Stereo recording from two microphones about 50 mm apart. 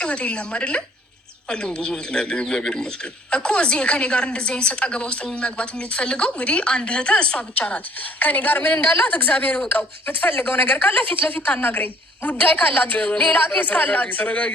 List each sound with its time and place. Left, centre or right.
0.0 s a woman's voice: left